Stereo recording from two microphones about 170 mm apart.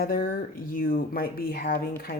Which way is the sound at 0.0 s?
55° left (ahead or behind).